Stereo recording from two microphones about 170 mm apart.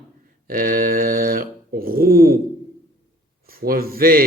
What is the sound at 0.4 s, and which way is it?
Speech, 55° right (ahead or behind).